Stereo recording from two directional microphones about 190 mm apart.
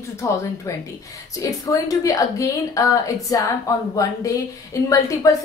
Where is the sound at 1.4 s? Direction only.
20° left (ahead or behind).